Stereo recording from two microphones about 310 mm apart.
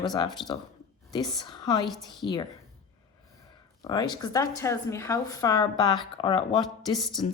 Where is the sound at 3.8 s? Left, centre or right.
Centre.